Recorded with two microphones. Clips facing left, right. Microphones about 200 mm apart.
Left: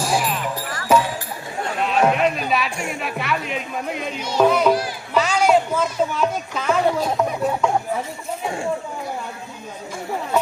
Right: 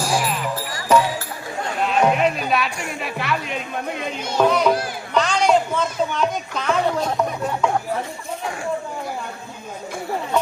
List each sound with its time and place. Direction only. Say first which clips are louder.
0.0 s music: even; centre (ahead or behind)
2.8 s a man's voice: left 1 dB; centre (ahead or behind)